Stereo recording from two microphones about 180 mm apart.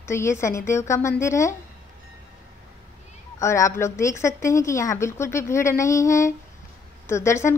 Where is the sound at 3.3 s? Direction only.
15° left (ahead or behind).